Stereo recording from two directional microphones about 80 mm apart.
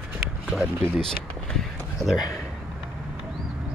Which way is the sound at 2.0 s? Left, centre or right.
Centre.